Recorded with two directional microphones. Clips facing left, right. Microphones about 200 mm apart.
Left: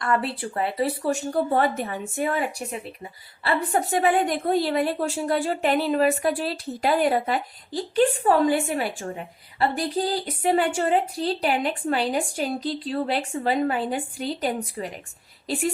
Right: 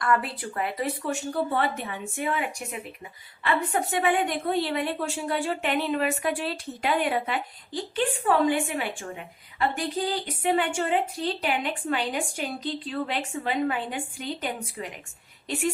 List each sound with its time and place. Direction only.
0.0 s speech: 30° left (ahead or behind)